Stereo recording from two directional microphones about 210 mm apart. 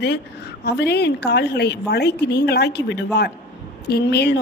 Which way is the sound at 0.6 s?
50° left (ahead or behind).